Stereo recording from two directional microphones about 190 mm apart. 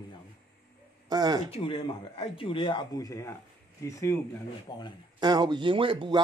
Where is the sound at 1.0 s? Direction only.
20° right (ahead or behind).